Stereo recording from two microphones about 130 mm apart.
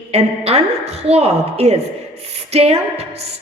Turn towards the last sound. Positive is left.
turn(degrees=-50)  # may be behind; listen again after turning